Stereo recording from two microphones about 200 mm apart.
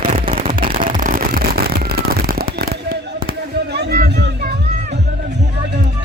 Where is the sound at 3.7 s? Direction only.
55° right (ahead or behind).